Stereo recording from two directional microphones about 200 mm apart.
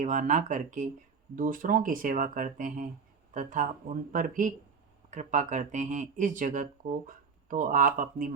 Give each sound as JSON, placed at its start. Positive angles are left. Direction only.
{"t": 0.0, "sound": "speech", "side_deg": -40}